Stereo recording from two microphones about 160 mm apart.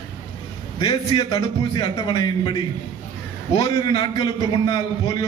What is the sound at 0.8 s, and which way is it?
A man's voice, 30° left (ahead or behind).